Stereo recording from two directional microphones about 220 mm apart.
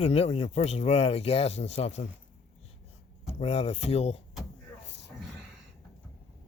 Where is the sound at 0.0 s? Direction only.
30° left (ahead or behind).